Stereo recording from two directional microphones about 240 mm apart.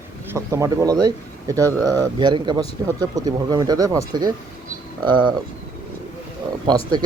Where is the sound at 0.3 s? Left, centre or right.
Centre.